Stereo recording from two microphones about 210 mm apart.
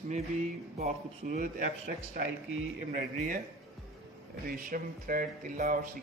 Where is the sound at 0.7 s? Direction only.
35° right (ahead or behind).